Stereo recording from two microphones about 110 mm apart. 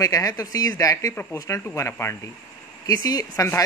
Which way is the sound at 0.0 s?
30° left (ahead or behind).